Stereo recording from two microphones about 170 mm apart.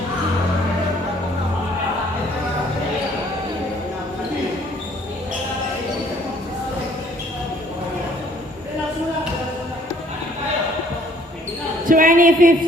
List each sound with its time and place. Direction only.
11.9 s speech: 55° right (ahead or behind)